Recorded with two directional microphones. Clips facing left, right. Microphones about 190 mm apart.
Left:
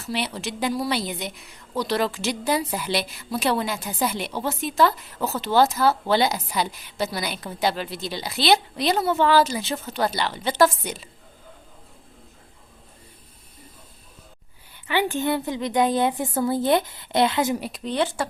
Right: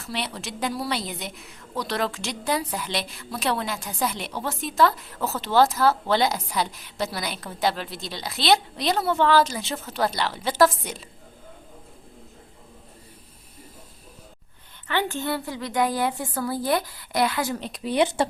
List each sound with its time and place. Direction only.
0.0 s a woman's voice: centre (ahead or behind)
14.8 s a woman's voice: 15° left (ahead or behind)
17.6 s a woman's voice: centre (ahead or behind)
17.9 s speech: 15° right (ahead or behind)